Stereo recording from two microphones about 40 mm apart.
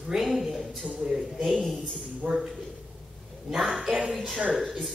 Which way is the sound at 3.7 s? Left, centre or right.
Centre.